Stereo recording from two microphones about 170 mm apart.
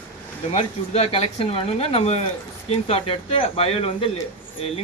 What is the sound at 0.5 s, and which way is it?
Speech, 35° left (ahead or behind).